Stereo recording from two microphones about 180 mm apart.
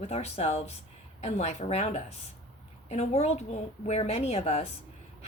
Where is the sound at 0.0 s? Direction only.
35° left (ahead or behind).